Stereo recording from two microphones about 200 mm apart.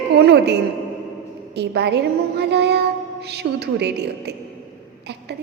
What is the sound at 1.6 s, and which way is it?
A woman's voice, 55° right (ahead or behind).